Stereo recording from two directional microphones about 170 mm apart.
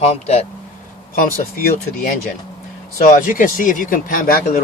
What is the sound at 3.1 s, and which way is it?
Speech, 50° left (ahead or behind).